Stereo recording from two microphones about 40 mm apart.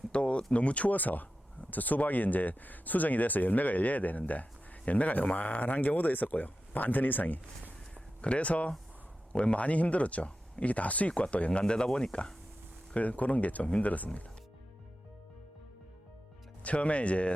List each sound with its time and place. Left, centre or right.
0.1 s a sound: left
0.5 s speech: left
7.9 s speech: left
12.9 s speech: left
16.6 s speech: left